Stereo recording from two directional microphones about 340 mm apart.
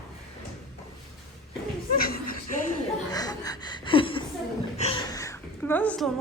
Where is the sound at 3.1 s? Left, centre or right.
Centre.